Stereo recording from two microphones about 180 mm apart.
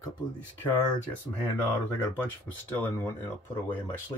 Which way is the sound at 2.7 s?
15° left (ahead or behind).